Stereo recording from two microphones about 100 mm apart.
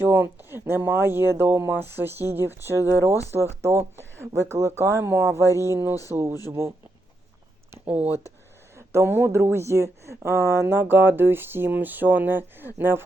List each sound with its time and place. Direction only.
0.0 s speech: 20° right (ahead or behind)
7.7 s speech: 15° right (ahead or behind)